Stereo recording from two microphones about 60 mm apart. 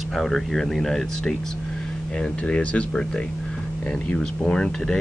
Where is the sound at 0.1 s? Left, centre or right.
Centre.